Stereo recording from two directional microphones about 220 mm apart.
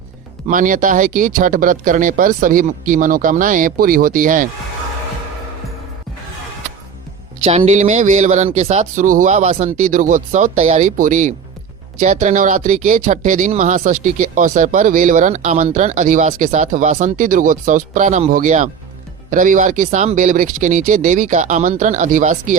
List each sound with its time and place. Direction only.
0.4 s speech: 35° right (ahead or behind)
7.4 s speech: 30° right (ahead or behind)